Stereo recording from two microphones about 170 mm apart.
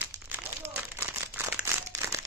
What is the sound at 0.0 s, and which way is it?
Crumpling, 15° right (ahead or behind).